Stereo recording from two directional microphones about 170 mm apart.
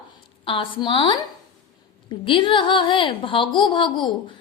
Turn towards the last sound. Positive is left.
turn(degrees=30)  # may be behind; listen again after turning